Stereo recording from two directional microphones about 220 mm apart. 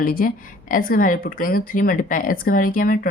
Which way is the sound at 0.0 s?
40° left (ahead or behind).